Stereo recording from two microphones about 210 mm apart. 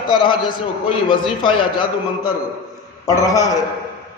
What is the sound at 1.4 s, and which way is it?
A man's voice, 20° left (ahead or behind).